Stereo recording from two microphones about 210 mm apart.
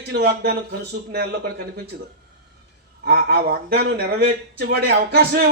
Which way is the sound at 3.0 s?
50° right (ahead or behind).